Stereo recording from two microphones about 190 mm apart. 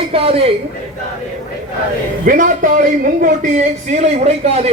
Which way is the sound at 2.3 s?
45° right (ahead or behind).